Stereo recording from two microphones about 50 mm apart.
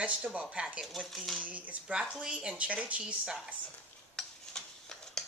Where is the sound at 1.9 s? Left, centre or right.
Centre.